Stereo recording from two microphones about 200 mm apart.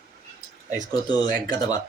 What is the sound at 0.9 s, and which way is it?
Speech, 20° left (ahead or behind).